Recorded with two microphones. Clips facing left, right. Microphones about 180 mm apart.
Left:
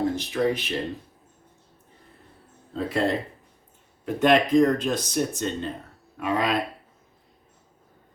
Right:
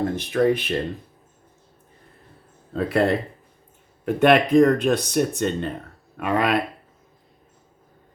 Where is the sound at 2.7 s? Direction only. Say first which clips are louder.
Right 4 dB; 60° right (ahead or behind).